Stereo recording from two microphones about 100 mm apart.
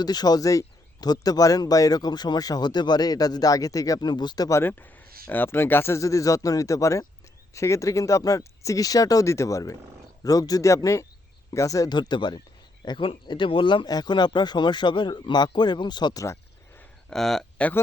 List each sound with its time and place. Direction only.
0.0 s a man's voice: 45° left (ahead or behind)
4.6 s a man's voice: 20° left (ahead or behind); by 11.9 s 35° left (ahead or behind)
11.9 s speech: 50° left (ahead or behind)
13.8 s speech: 45° left (ahead or behind)
17.1 s speech: 5° left (ahead or behind)